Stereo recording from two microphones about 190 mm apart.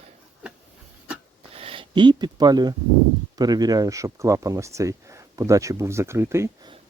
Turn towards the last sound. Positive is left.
turn(degrees=-15)  # may be behind; listen again after turning